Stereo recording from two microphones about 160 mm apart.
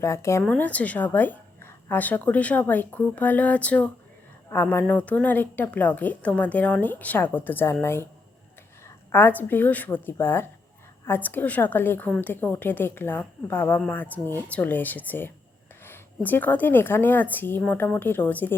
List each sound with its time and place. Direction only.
0.0 s a woman's voice: 15° left (ahead or behind)
9.1 s a woman's voice: 10° left (ahead or behind)